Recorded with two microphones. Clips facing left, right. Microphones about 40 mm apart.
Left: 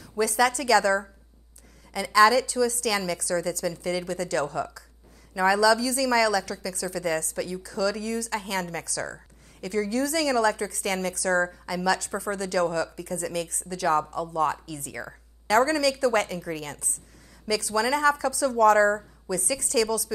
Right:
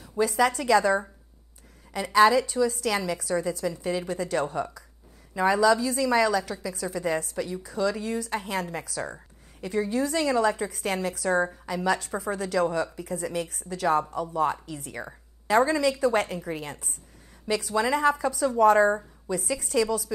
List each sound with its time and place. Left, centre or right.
0.2 s a woman's voice: left
2.0 s a woman's voice: left
17.6 s a woman's voice: left